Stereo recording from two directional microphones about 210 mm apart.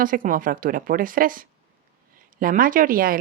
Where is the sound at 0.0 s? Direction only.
40° right (ahead or behind).